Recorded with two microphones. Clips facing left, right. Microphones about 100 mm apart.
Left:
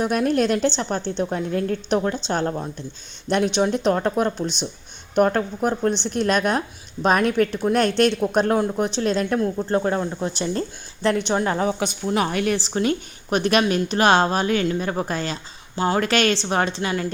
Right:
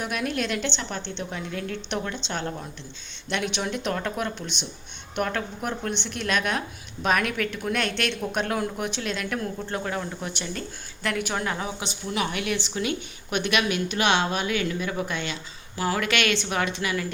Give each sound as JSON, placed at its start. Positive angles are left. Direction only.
{"t": 0.0, "sound": "a woman's voice", "side_deg": 35}